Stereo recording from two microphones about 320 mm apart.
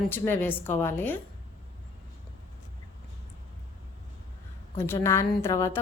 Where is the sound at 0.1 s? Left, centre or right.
Centre.